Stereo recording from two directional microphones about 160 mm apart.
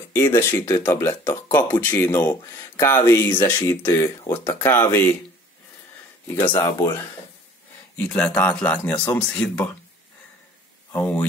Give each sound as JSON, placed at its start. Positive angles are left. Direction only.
{"t": 0.1, "sound": "speech", "side_deg": 15}
{"t": 6.2, "sound": "speech", "side_deg": 10}
{"t": 8.0, "sound": "speech", "side_deg": 5}
{"t": 10.9, "sound": "speech", "side_deg": 10}